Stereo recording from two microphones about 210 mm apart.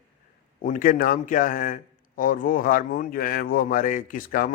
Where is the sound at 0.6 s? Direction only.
40° left (ahead or behind).